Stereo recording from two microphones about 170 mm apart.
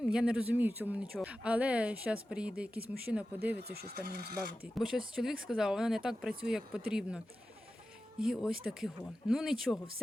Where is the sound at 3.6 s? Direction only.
65° right (ahead or behind).